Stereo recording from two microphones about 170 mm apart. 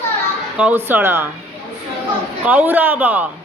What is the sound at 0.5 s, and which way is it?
Speech, 10° right (ahead or behind).